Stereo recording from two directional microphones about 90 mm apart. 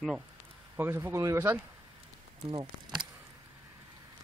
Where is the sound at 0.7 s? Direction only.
25° right (ahead or behind).